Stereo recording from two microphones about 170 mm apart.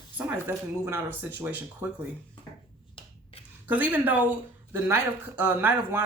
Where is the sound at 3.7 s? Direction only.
10° right (ahead or behind).